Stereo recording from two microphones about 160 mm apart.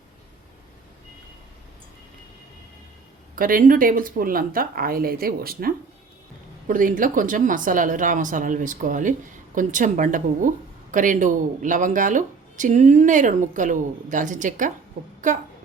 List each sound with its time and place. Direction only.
3.3 s speech: 60° right (ahead or behind)